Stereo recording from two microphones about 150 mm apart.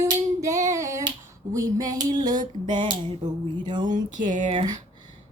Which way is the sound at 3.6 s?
30° right (ahead or behind).